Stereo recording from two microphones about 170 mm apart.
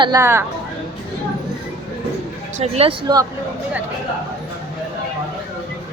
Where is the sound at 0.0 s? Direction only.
20° right (ahead or behind).